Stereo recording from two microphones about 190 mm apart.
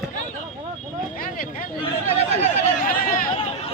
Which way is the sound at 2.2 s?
40° left (ahead or behind).